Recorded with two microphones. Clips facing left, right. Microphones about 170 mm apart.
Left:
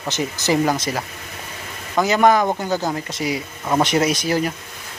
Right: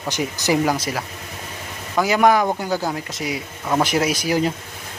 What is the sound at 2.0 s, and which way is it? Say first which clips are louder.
Speech: left 1 dB; 10° right (ahead or behind).